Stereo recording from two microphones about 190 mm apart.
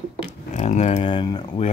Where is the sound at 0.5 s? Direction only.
40° left (ahead or behind); by 1.4 s 25° left (ahead or behind).